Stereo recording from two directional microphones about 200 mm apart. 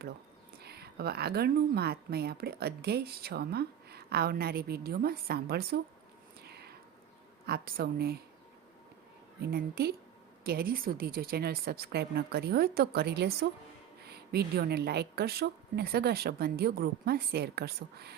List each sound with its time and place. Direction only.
0.6 s speech: 55° right (ahead or behind)
6.4 s whispering: 50° right (ahead or behind)
7.4 s speech: 50° right (ahead or behind)
9.4 s speech: 50° right (ahead or behind)